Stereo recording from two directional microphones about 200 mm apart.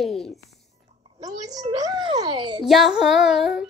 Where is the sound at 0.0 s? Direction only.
Centre (ahead or behind).